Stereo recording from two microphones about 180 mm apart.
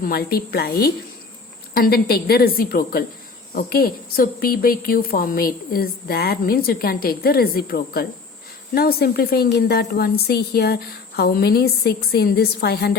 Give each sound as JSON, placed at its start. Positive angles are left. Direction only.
{"t": 0.0, "sound": "speech", "side_deg": 55}